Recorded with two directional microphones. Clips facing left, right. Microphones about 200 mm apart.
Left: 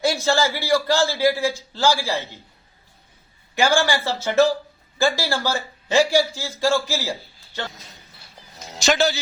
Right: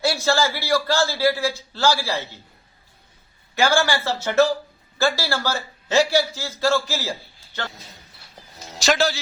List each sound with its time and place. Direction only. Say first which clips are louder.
0.0 s a man's voice: left 1 dB; 15° left (ahead or behind)
3.5 s a man's voice: even; 15° left (ahead or behind)
8.7 s a man's voice: left 1 dB; centre (ahead or behind)